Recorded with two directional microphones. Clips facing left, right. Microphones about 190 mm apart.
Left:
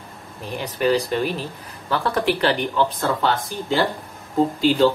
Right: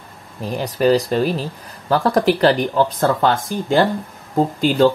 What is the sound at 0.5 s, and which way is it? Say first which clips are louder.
Speech: right 4 dB; 40° right (ahead or behind).